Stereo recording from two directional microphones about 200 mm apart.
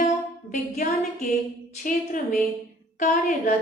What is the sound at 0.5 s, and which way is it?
Music, 45° left (ahead or behind).